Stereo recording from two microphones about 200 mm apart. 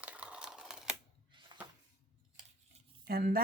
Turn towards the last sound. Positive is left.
turn(degrees=-50)  # may be behind; listen again after turning